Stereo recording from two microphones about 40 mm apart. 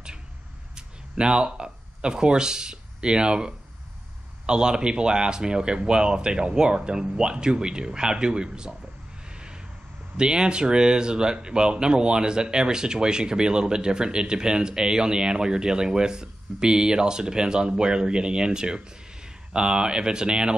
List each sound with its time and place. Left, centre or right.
0.7 s speech: right
10.1 s speech: right